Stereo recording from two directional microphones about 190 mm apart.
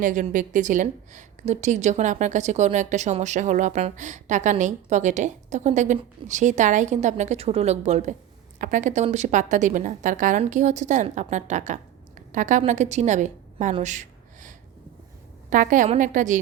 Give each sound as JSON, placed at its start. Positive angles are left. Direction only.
{"t": 0.0, "sound": "a woman's voice", "side_deg": -45}
{"t": 13.8, "sound": "gasp", "side_deg": -40}
{"t": 15.4, "sound": "a woman's voice", "side_deg": -45}